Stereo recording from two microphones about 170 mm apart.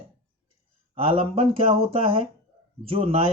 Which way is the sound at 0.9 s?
30° right (ahead or behind).